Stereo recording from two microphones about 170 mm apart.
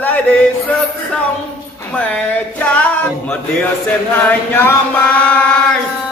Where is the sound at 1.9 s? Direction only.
5° left (ahead or behind).